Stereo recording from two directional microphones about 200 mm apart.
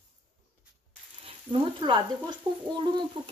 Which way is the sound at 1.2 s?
25° right (ahead or behind).